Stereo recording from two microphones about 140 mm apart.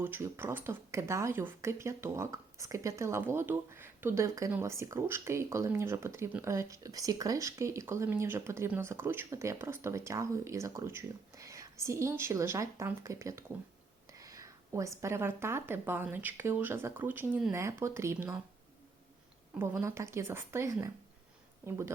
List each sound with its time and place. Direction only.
0.0 s speech: 15° right (ahead or behind)
19.5 s speech: 20° right (ahead or behind)